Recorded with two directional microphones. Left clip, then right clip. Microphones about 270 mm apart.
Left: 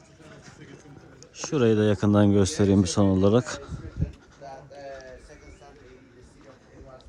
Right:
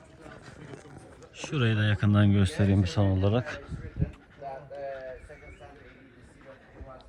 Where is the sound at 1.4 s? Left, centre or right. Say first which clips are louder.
Left 8 dB; centre; by 3.6 s left.